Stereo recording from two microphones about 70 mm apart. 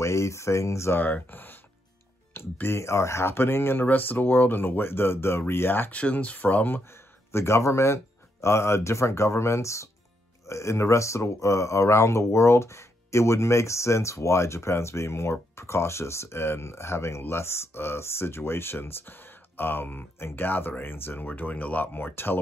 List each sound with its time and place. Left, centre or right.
0.0 s speech: left
1.0 s speech: left
5.9 s speech: centre
6.9 s speech: left